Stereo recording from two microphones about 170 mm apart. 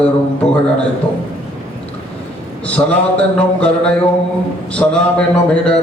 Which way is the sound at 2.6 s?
5° left (ahead or behind).